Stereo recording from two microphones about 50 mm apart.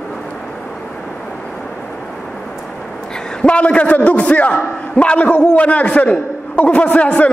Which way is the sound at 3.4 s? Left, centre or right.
Left.